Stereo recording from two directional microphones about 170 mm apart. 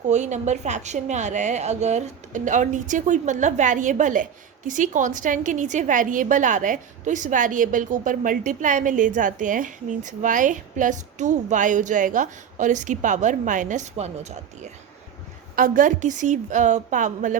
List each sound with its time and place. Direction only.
0.1 s a woman's voice: 45° right (ahead or behind)
15.5 s a woman's voice: 55° right (ahead or behind)